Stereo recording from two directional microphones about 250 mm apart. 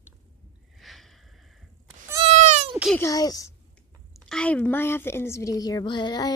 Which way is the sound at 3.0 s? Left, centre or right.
Centre.